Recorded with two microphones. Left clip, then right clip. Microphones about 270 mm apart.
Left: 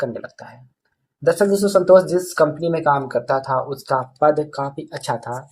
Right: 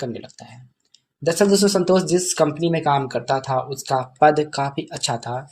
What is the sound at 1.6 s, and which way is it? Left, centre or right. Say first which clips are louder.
Speech: left 6 dB; right.